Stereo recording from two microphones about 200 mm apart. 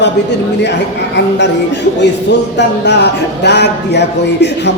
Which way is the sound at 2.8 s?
55° left (ahead or behind).